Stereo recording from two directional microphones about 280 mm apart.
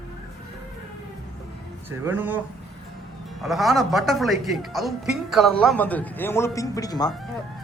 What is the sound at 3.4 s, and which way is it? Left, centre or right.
A man's voice, centre.